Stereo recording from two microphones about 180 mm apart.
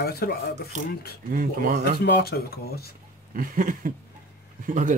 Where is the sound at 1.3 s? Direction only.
55° right (ahead or behind).